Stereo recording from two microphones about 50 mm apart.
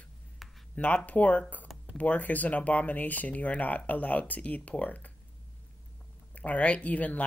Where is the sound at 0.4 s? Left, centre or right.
Centre.